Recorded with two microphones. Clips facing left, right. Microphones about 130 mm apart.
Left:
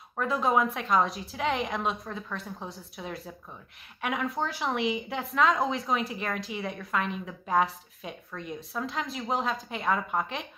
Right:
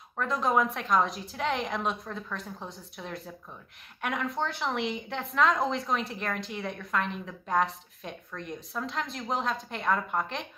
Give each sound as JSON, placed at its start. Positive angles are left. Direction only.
{"t": 0.2, "sound": "a woman's voice", "side_deg": 5}